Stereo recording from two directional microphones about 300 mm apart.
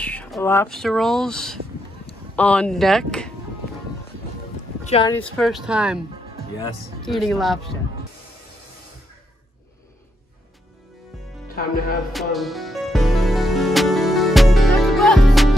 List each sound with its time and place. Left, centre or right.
0.0 s speech: centre
4.8 s speech: centre
5.1 s speech: centre
7.1 s speech: centre
11.4 s music: left
12.1 s music: centre